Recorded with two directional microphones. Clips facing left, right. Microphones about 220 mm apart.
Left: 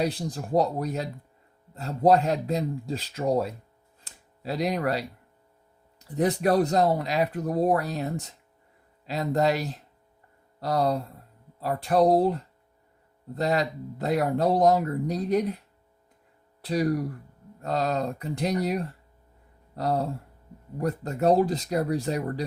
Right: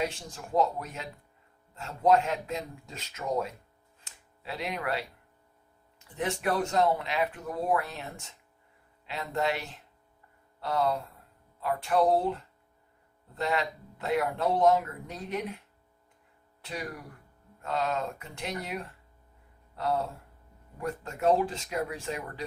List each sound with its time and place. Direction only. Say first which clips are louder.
0.0 s speech: left 6 dB; 35° left (ahead or behind)
4.0 s a sound: left 8 dB; 40° left (ahead or behind)
6.0 s speech: left 8 dB; 35° left (ahead or behind)